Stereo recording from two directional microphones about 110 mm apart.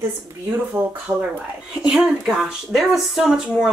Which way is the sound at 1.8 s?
5° right (ahead or behind).